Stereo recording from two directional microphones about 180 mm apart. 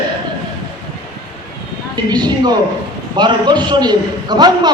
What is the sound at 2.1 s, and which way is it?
A man's voice, 25° right (ahead or behind).